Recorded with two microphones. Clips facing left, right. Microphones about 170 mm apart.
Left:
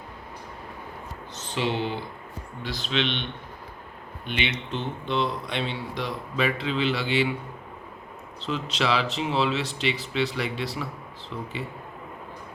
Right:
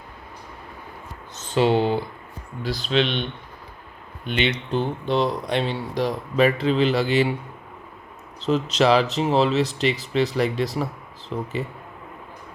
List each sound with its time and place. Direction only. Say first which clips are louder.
1.5 s speech: right 8 dB; 40° right (ahead or behind)
4.7 s speech: right 6 dB; 40° right (ahead or behind)
8.4 s speech: right 8 dB; 40° right (ahead or behind)